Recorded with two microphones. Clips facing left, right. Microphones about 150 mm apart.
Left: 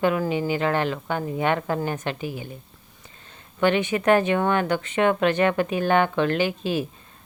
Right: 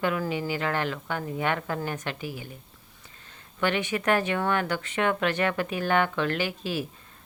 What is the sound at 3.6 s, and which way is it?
Speech, 20° left (ahead or behind).